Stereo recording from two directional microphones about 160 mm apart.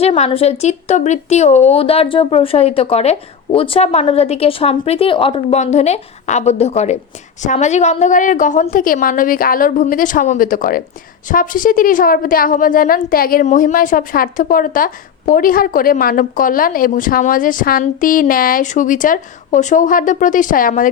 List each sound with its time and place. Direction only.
0.0 s a woman's voice: 35° left (ahead or behind); by 20.8 s 60° left (ahead or behind)